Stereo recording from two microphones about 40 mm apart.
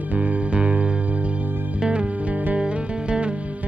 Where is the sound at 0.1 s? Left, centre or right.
Right.